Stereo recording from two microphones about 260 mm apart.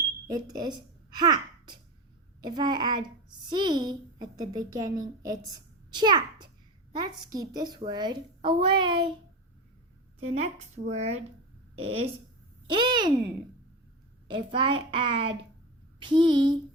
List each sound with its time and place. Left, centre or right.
0.3 s a child's voice: centre
10.2 s a woman's voice: right
14.3 s a woman's voice: centre